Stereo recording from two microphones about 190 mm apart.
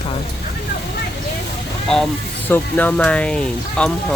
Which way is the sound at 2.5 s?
10° left (ahead or behind).